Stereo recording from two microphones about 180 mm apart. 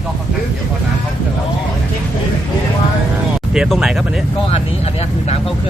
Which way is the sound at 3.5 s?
5° right (ahead or behind).